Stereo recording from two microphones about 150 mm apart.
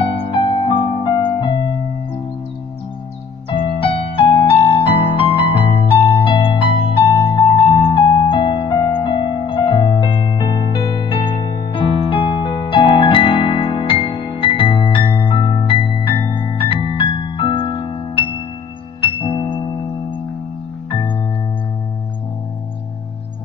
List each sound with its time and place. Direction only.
0.0 s music: 35° left (ahead or behind)
3.5 s music: 40° left (ahead or behind)